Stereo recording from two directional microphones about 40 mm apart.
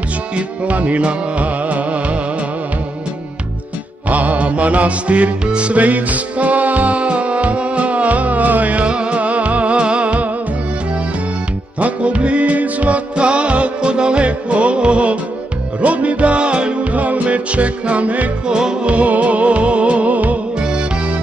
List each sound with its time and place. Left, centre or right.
0.7 s music: right
4.1 s music: right
8.8 s music: right
11.8 s music: right
16.9 s music: right
18.5 s music: centre
18.9 s music: right